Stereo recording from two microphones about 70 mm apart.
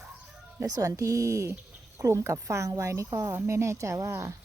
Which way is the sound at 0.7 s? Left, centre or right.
Right.